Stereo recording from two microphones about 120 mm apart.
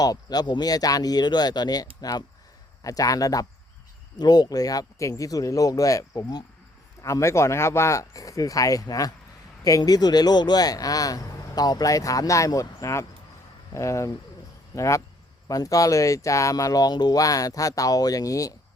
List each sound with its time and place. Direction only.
0.0 s speech: 30° left (ahead or behind)